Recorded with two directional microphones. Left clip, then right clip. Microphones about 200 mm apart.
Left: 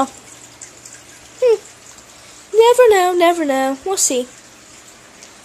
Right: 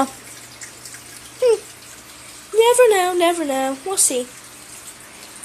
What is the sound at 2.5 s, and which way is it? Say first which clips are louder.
Speech: left 3 dB; 20° left (ahead or behind).